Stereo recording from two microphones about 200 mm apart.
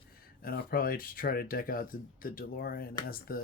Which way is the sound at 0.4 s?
45° left (ahead or behind).